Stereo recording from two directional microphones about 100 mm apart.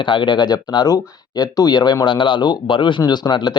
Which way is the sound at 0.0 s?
55° left (ahead or behind).